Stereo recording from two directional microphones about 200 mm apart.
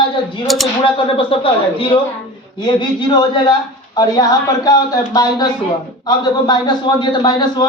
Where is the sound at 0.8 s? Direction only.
25° left (ahead or behind).